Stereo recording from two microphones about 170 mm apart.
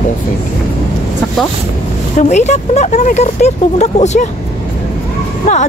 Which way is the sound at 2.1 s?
45° left (ahead or behind).